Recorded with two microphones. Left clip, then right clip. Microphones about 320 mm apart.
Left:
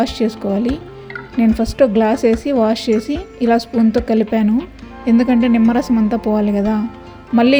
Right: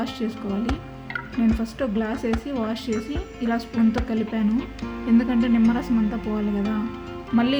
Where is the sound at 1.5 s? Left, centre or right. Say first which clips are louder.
Left 13 dB; left.